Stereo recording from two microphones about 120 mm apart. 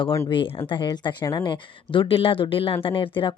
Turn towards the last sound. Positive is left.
turn(degrees=45)  # may be behind; listen again after turning